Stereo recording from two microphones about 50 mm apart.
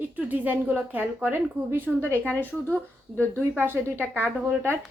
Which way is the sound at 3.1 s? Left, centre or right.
Right.